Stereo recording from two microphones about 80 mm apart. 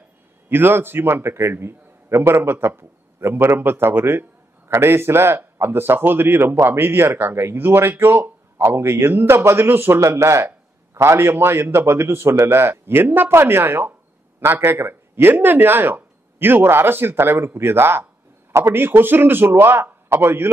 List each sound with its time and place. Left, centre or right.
0.5 s a man's voice: right
9.9 s a man's voice: right